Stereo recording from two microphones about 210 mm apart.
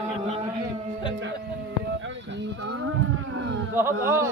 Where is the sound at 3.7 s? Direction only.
10° right (ahead or behind).